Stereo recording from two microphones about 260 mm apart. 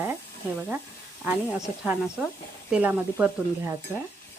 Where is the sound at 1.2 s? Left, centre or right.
Centre.